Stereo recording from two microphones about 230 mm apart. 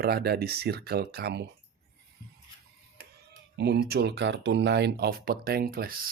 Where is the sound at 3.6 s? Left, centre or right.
Right.